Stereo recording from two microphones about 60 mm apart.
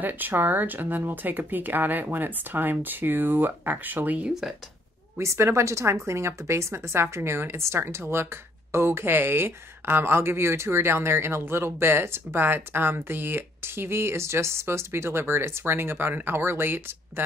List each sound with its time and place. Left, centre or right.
0.0 s speech: right
4.3 s speech: centre
5.2 s speech: right